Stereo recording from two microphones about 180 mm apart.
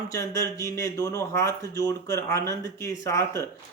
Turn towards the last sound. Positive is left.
turn(degrees=15)  # may be behind; listen again after turning